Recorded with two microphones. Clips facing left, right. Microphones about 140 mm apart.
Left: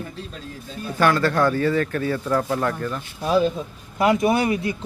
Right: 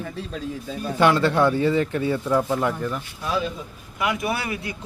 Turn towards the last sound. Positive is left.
turn(degrees=25)  # may be behind; listen again after turning